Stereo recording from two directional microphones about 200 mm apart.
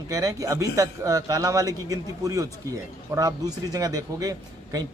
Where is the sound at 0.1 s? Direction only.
15° right (ahead or behind).